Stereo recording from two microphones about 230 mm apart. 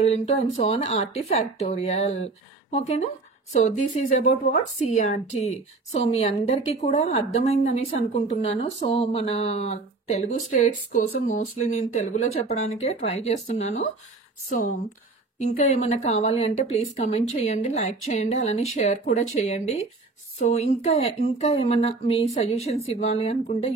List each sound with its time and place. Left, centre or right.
0.0 s a woman's voice: left
3.5 s a woman's voice: left
15.3 s a woman's voice: left